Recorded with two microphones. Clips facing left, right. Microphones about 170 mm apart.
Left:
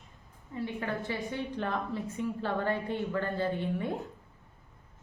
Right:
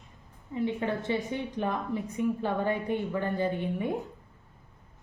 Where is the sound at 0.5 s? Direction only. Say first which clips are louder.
Right 5 dB; 20° right (ahead or behind).